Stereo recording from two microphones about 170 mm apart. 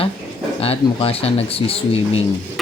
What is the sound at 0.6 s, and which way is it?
Speech, 35° left (ahead or behind).